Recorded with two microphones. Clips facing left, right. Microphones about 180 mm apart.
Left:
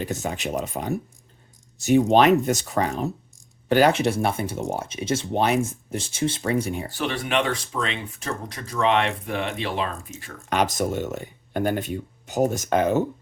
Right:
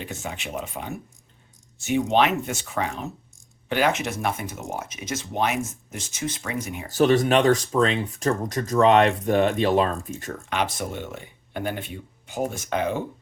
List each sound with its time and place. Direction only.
0.0 s speech: 40° left (ahead or behind)
6.9 s speech: 40° right (ahead or behind)
10.5 s speech: 40° left (ahead or behind)